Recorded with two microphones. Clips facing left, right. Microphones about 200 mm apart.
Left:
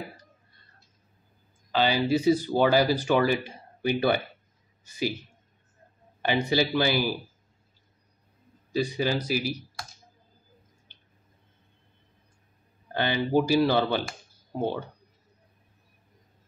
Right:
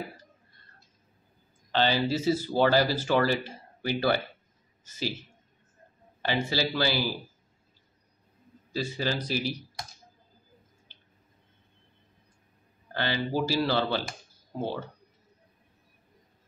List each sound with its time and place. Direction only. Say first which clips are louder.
1.7 s speech: left 2 dB; 15° left (ahead or behind)
6.2 s speech: left 4 dB; 20° left (ahead or behind)
8.7 s speech: left 4 dB; 15° left (ahead or behind)
12.9 s speech: left 5 dB; 20° left (ahead or behind)